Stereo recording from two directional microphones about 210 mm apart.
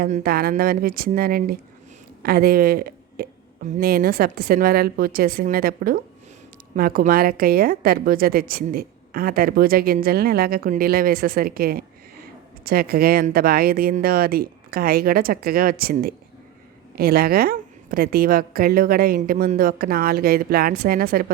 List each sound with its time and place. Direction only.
0.0 s a woman's voice: 45° right (ahead or behind)